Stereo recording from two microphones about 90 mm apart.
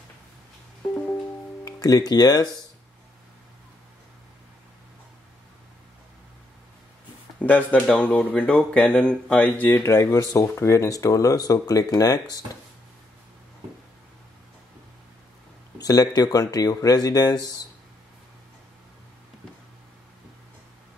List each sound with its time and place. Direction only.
1.6 s speech: 45° left (ahead or behind)
7.3 s speech: 15° left (ahead or behind)
9.8 s speech: 30° left (ahead or behind); by 12.4 s 45° left (ahead or behind)
15.8 s speech: 45° left (ahead or behind)